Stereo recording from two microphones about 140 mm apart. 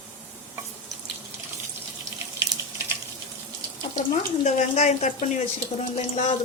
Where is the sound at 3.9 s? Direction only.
55° left (ahead or behind).